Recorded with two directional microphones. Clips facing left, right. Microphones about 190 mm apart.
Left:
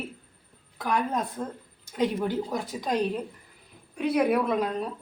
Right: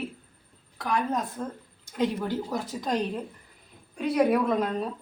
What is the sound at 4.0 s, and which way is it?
Speech, centre (ahead or behind).